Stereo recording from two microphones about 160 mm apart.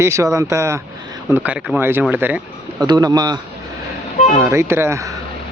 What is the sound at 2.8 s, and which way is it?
Speech, 25° right (ahead or behind).